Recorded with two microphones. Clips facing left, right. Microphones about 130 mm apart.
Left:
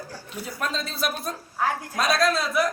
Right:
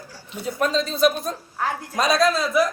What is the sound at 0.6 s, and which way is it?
Speech, 5° left (ahead or behind).